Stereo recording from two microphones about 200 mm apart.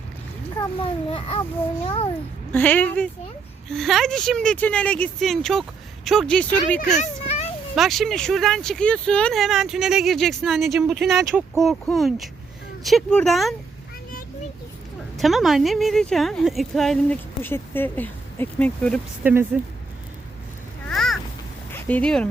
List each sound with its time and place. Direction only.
1.1 s speech: 30° left (ahead or behind)
2.5 s a woman's voice: 10° left (ahead or behind)
6.7 s speech: 35° left (ahead or behind)
7.8 s a woman's voice: centre (ahead or behind)
15.2 s a woman's voice: centre (ahead or behind)
19.2 s speech: 10° right (ahead or behind)
20.8 s a sound: centre (ahead or behind)
21.7 s speech: 10° left (ahead or behind)